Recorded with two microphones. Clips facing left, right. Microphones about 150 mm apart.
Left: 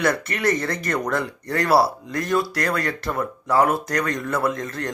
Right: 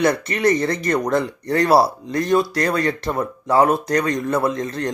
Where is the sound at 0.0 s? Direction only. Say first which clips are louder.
Right 4 dB; 20° right (ahead or behind).